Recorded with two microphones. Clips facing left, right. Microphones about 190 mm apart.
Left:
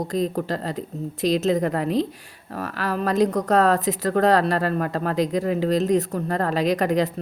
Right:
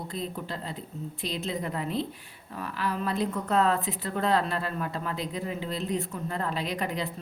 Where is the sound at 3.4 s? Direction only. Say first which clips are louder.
Left 7 dB; 80° left.